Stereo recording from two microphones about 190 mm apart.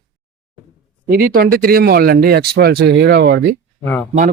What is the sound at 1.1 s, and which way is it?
A man's voice, 50° right (ahead or behind).